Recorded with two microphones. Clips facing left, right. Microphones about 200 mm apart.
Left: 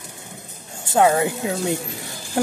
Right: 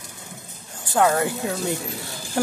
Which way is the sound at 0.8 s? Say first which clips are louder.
Left 3 dB; 20° left (ahead or behind).